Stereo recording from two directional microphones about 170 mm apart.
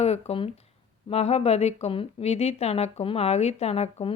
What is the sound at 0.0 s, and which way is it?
Speech, 35° left (ahead or behind).